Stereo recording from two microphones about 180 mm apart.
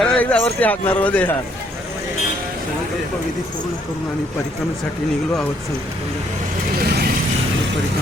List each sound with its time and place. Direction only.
0.0 s a man's voice: 5° left (ahead or behind)
6.7 s vehicle: 60° right (ahead or behind)